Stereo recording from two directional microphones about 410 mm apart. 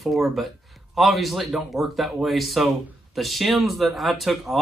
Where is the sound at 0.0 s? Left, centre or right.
Centre.